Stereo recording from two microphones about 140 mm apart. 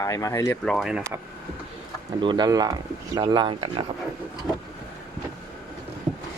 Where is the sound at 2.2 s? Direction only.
35° right (ahead or behind).